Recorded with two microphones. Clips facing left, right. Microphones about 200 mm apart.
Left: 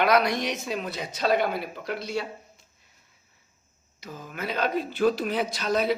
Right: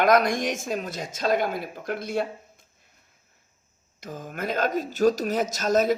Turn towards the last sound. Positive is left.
turn(degrees=-45)  # may be behind; listen again after turning